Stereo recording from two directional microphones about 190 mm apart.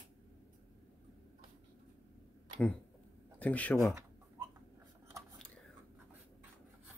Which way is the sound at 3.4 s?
5° left (ahead or behind).